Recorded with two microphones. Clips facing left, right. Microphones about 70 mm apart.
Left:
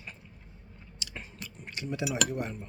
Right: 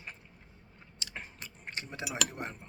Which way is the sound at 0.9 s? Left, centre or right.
Right.